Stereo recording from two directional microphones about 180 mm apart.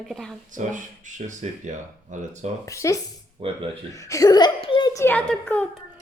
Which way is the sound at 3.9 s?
20° left (ahead or behind).